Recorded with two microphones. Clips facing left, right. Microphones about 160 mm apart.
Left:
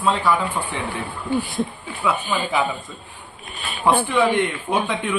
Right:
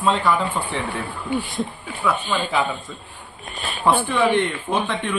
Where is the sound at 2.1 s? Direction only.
5° left (ahead or behind).